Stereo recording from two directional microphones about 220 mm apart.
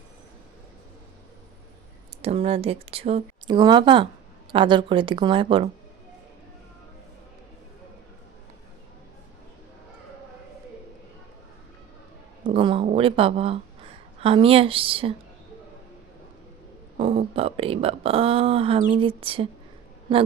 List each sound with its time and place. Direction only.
2.2 s speech: 25° right (ahead or behind)
12.5 s speech: 25° right (ahead or behind)
17.0 s speech: 25° right (ahead or behind)